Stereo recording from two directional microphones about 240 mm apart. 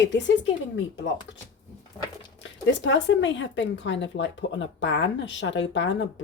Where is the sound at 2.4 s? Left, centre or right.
Left.